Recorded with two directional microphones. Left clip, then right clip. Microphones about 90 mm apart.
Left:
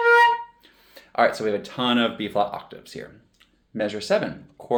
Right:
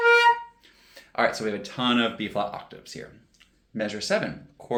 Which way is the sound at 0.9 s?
35° left (ahead or behind).